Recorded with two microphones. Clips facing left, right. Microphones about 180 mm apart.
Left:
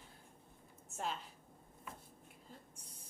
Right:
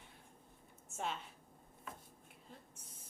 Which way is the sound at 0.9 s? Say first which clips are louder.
Even; centre (ahead or behind).